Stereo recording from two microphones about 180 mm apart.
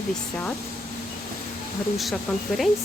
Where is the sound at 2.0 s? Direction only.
Centre (ahead or behind).